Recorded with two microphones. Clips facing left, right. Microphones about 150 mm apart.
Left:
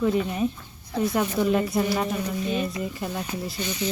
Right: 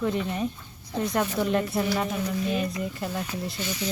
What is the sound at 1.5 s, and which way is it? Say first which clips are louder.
Speech: left 2 dB; centre (ahead or behind).